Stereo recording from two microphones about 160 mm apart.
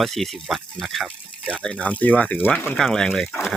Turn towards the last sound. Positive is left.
turn(degrees=5)  # may be behind; listen again after turning